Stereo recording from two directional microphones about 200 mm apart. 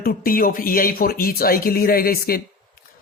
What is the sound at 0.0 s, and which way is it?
Speech, 45° left (ahead or behind).